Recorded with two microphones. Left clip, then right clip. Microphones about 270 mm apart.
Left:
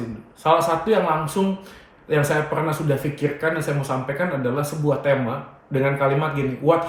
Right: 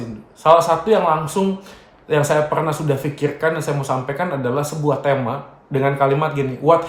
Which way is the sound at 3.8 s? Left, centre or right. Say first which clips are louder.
Right 3 dB; right.